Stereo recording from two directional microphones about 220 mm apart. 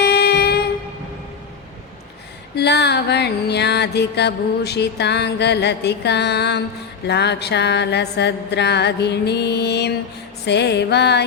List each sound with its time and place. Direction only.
0.0 s train: 45° left (ahead or behind)
2.6 s mantra: 50° left (ahead or behind)